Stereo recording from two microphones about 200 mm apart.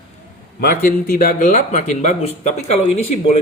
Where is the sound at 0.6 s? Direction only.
45° left (ahead or behind).